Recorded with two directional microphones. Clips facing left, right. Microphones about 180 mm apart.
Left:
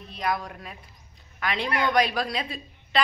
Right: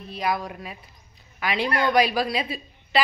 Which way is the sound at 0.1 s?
5° right (ahead or behind).